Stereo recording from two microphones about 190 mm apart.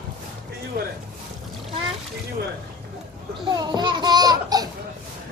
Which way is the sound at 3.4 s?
20° right (ahead or behind).